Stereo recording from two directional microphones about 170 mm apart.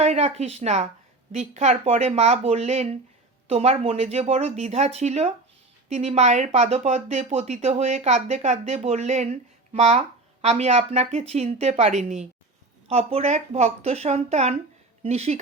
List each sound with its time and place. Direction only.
0.0 s speech: 40° right (ahead or behind)